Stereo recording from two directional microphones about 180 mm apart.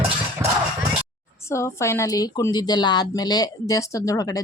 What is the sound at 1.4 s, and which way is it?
A woman's voice, 15° left (ahead or behind).